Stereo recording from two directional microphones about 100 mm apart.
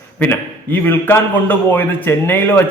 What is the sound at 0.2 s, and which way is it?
A man's voice, 20° left (ahead or behind).